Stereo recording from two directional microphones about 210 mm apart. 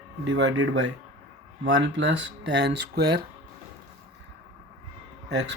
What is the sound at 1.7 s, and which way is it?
Speech, 60° right (ahead or behind).